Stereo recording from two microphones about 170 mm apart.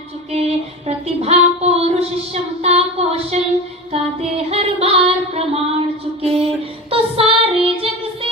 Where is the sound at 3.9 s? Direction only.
35° right (ahead or behind).